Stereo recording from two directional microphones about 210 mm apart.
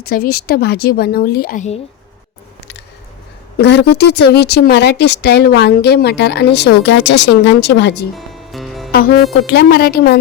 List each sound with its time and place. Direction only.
0.0 s speech: 45° left (ahead or behind)
3.6 s speech: 50° left (ahead or behind)
8.1 s music: centre (ahead or behind)
9.5 s speech: 50° left (ahead or behind)